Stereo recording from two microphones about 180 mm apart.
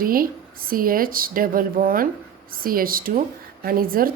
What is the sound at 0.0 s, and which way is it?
A woman's voice, 55° right (ahead or behind).